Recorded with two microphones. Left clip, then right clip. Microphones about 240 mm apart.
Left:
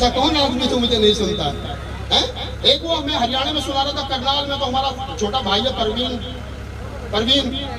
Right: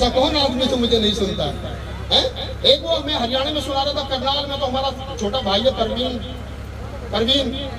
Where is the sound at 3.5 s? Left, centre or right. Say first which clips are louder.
Even; right.